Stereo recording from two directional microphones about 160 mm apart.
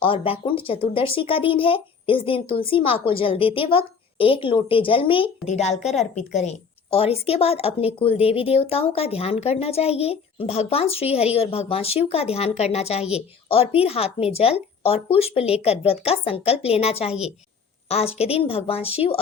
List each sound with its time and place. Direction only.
0.0 s a woman's voice: 35° left (ahead or behind)
5.5 s a woman's voice: 45° left (ahead or behind)